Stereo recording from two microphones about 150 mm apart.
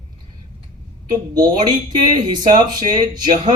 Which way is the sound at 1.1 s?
30° right (ahead or behind).